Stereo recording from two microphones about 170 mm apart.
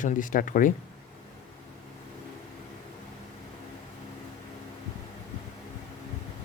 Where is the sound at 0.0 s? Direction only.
50° left (ahead or behind).